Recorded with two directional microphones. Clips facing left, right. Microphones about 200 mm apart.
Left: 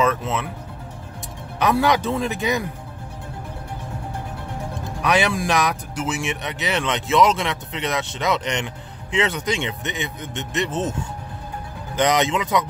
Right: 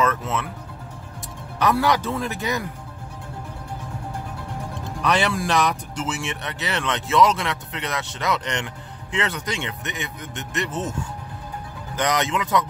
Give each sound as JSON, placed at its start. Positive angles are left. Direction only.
{"t": 0.0, "sound": "speech", "side_deg": 15}
{"t": 1.6, "sound": "speech", "side_deg": 20}
{"t": 5.0, "sound": "speech", "side_deg": 10}